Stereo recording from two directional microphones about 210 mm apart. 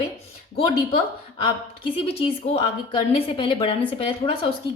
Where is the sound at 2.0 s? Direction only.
25° left (ahead or behind).